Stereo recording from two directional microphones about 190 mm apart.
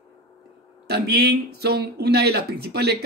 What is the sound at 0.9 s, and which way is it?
Speech, 60° right (ahead or behind).